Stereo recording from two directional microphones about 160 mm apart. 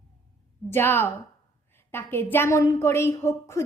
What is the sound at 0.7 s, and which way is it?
A woman's voice, 15° left (ahead or behind).